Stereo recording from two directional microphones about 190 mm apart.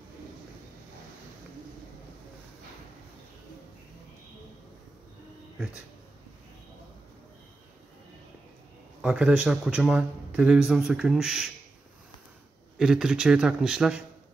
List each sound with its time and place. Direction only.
9.0 s speech: 5° right (ahead or behind)
12.7 s speech: 5° right (ahead or behind)